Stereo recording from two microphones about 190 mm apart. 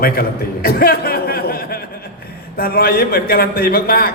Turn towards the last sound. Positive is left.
turn(degrees=50)  # may be behind; listen again after turning